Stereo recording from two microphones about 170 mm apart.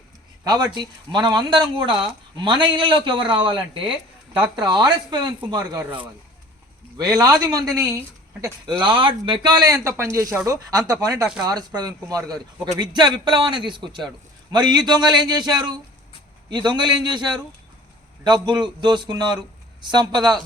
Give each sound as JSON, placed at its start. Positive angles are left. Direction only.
{"t": 0.4, "sound": "a woman's voice", "side_deg": -25}
{"t": 8.8, "sound": "speech", "side_deg": -30}
{"t": 18.4, "sound": "speech", "side_deg": -25}